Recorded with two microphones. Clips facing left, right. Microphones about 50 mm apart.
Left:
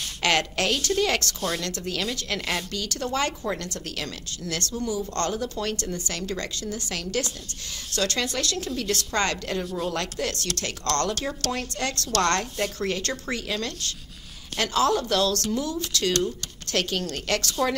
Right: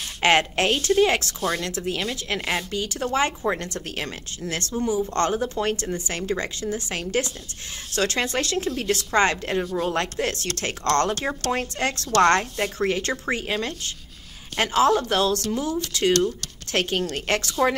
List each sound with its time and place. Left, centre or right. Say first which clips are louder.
0.2 s a woman's voice: right 4 dB; right